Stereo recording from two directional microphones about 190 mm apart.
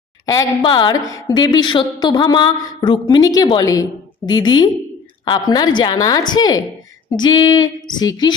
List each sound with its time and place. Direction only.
0.3 s a woman's voice: 20° left (ahead or behind)